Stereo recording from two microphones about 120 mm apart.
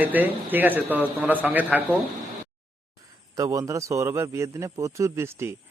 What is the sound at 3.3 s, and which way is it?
A man's voice, 30° right (ahead or behind).